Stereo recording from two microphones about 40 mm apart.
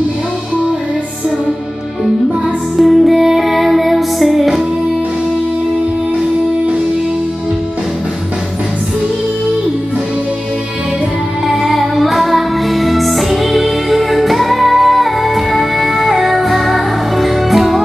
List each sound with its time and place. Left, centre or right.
2.8 s music: centre
11.4 s music: centre